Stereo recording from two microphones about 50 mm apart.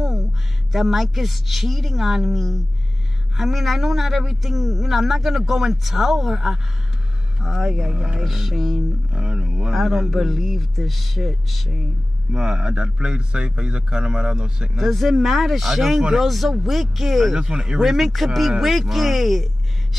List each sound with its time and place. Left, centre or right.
0.7 s a man's voice: centre
8.2 s a man's voice: centre
9.1 s speech: centre
9.8 s a man's voice: centre
12.4 s a man's voice: centre
14.8 s a man's voice: centre
17.4 s a man's voice: centre